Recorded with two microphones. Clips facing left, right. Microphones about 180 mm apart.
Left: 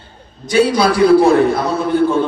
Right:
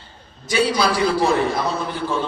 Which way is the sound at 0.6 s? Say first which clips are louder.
Left 6 dB; 55° left (ahead or behind).